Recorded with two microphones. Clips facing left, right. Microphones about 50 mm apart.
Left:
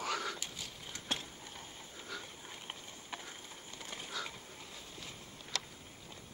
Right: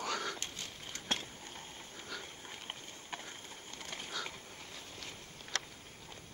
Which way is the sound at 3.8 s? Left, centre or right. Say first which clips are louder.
Right 1 dB; right.